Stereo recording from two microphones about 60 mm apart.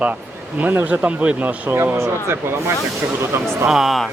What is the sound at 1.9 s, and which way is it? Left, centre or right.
Speech, right.